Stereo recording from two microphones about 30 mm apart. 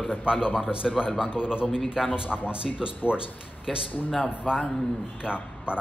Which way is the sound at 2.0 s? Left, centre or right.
Centre.